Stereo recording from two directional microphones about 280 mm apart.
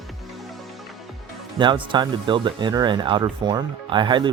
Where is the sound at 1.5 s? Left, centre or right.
Centre.